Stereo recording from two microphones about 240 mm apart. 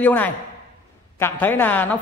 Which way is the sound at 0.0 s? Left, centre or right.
Centre.